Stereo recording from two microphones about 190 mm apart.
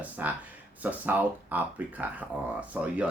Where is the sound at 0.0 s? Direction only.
10° right (ahead or behind).